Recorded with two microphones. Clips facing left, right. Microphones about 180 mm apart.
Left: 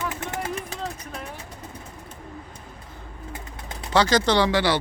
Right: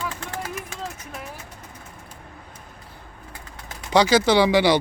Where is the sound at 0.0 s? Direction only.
20° left (ahead or behind).